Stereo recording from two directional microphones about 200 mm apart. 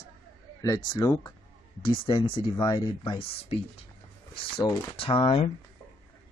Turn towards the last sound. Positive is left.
turn(degrees=25)  # may be behind; listen again after turning